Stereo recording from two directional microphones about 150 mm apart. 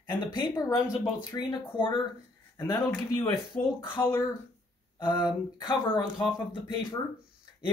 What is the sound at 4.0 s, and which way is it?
Speech, 15° left (ahead or behind).